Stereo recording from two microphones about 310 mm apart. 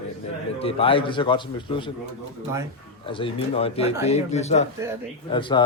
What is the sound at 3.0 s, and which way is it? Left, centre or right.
A man's voice, centre.